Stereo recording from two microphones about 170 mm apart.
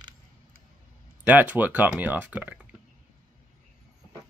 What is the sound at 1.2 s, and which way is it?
Speech, 10° right (ahead or behind).